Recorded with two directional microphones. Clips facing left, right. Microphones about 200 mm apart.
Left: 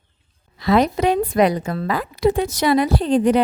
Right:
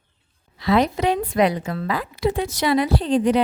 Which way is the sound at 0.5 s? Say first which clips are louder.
Left 2 dB; 45° left (ahead or behind).